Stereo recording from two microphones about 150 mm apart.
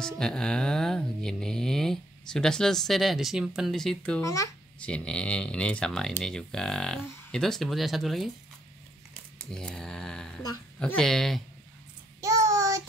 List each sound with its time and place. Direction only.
0.0 s mantra: 5° left (ahead or behind)
4.2 s a child's voice: 20° left (ahead or behind)
4.7 s mantra: 5° left (ahead or behind)
9.5 s mantra: 5° left (ahead or behind)
12.2 s child singing: 20° right (ahead or behind)